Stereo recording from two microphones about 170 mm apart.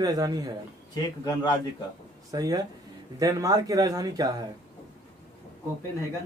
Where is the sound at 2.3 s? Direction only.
20° right (ahead or behind).